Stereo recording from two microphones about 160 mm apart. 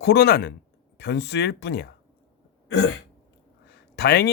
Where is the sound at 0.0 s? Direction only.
90° left.